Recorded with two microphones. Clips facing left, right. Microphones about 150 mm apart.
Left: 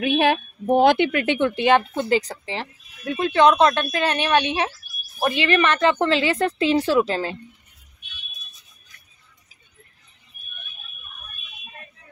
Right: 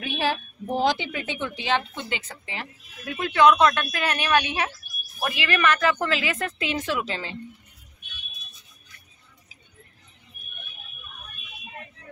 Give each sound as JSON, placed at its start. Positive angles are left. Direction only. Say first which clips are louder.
{"t": 0.0, "sound": "a woman's voice", "louder": "left 8 dB", "side_deg": 60}